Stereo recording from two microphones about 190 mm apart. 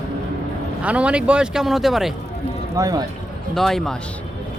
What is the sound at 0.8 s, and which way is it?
Speech, 5° right (ahead or behind).